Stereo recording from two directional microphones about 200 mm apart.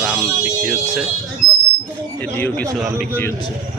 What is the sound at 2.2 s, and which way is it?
Speech, 10° left (ahead or behind).